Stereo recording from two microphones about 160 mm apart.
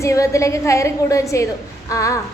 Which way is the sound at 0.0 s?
20° left (ahead or behind).